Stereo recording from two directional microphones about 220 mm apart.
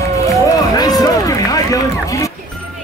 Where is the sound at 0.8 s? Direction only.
15° left (ahead or behind).